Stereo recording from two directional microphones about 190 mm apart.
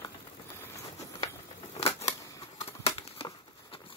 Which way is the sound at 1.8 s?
30° left (ahead or behind).